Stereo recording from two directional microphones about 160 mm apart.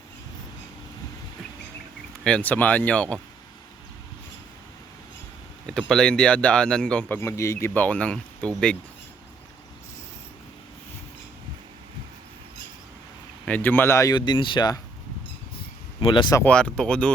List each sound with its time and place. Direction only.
2.2 s speech: 10° left (ahead or behind)
5.6 s speech: 5° left (ahead or behind)
7.2 s speech: 20° left (ahead or behind)
13.4 s speech: 10° left (ahead or behind); by 14.8 s 30° left (ahead or behind)
16.0 s speech: 30° left (ahead or behind)
16.4 s speech: 5° left (ahead or behind)